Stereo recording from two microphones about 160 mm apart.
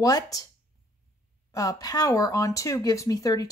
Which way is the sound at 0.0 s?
20° left (ahead or behind).